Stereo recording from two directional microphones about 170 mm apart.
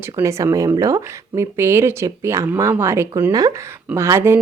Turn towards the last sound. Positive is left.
turn(degrees=-15)  # may be behind; listen again after turning